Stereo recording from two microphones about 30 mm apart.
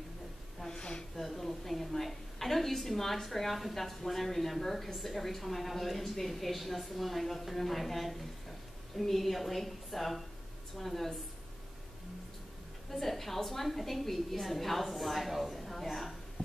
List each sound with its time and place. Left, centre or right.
0.7 s a sound: left
1.1 s a woman's voice: centre
12.9 s a woman's voice: centre